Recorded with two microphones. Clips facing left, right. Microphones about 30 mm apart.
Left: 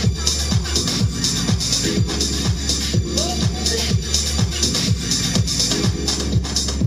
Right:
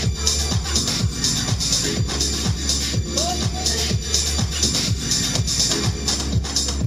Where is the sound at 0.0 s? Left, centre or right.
Centre.